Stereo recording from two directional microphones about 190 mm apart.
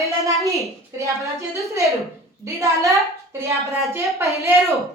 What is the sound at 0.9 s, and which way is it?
A woman's voice, 15° right (ahead or behind).